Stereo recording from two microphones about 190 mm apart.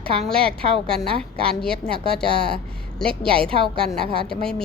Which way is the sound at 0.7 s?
Centre (ahead or behind).